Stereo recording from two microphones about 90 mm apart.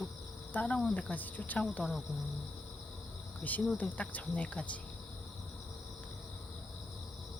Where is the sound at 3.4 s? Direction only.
20° left (ahead or behind).